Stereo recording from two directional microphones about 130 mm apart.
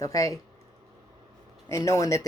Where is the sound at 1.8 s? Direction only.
25° left (ahead or behind).